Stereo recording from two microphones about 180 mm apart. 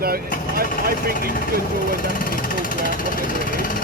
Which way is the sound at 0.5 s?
55° right (ahead or behind).